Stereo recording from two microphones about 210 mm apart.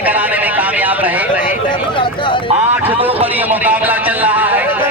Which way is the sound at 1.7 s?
25° left (ahead or behind).